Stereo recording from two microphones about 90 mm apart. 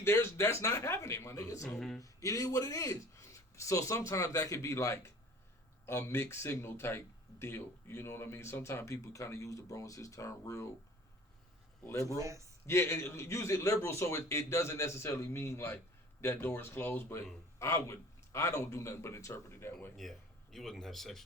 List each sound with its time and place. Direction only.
0.0 s speech: 30° left (ahead or behind)
11.9 s speech: 35° left (ahead or behind)
12.1 s a man's voice: 35° right (ahead or behind)
12.6 s speech: 30° left (ahead or behind)
20.0 s speech: centre (ahead or behind)